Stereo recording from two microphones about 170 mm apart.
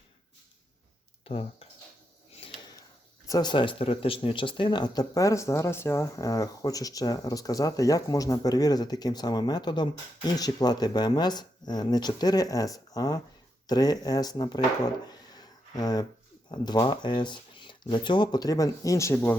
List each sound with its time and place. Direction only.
1.2 s speech: 35° left (ahead or behind)
3.2 s speech: 25° left (ahead or behind)
15.0 s a sound: 25° left (ahead or behind)
16.5 s speech: 25° left (ahead or behind)